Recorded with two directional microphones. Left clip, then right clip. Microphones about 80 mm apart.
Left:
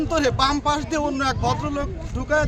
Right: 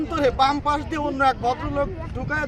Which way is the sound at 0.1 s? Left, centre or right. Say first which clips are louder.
Right 1 dB; left.